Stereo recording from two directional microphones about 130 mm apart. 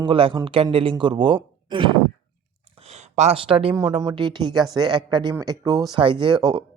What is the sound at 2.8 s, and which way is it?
Speech, 60° right (ahead or behind).